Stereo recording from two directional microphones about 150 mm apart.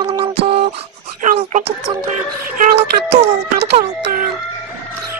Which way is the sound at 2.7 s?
45° right (ahead or behind).